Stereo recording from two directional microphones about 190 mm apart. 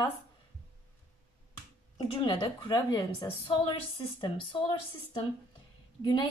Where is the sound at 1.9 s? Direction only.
25° left (ahead or behind).